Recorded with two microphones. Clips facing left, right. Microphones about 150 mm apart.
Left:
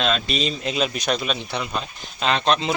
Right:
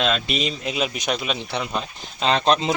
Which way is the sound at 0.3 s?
15° right (ahead or behind).